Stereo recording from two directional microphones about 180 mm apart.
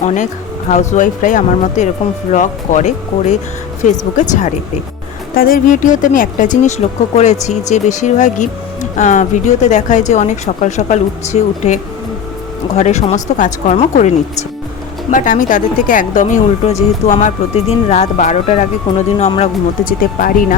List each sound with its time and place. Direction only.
0.0 s speech: 40° left (ahead or behind)
5.4 s speech: 50° left (ahead or behind)
15.1 s speech: 45° left (ahead or behind)
19.8 s speech: 50° left (ahead or behind)